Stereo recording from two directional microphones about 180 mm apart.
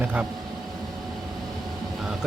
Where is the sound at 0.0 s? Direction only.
10° right (ahead or behind).